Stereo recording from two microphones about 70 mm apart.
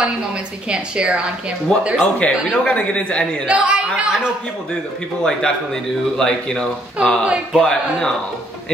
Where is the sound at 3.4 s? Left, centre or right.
Centre.